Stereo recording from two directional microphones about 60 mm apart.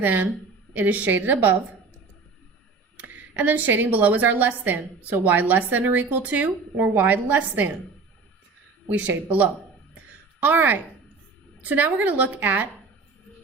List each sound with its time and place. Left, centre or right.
0.0 s a woman's voice: right
3.0 s a woman's voice: right
9.0 s a woman's voice: right